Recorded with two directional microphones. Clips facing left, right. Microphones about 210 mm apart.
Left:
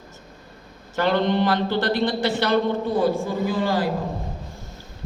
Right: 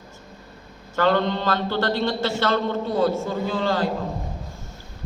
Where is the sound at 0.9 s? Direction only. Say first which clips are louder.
Left 1 dB; 15° left (ahead or behind).